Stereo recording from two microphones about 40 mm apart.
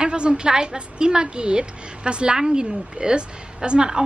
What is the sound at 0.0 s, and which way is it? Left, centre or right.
A woman's voice, right.